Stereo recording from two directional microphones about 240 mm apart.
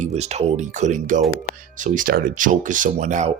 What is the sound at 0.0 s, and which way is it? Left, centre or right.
Speech, right.